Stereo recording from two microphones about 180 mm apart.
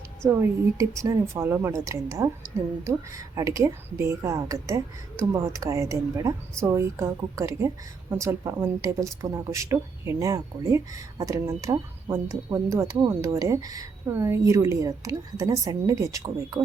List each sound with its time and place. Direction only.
0.3 s speech: 15° right (ahead or behind)
3.3 s speech: 15° right (ahead or behind)